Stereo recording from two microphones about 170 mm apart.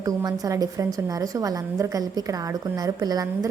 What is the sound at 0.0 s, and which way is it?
A woman's voice, 20° right (ahead or behind).